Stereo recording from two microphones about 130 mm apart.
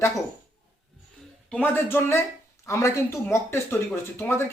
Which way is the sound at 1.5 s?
15° left (ahead or behind).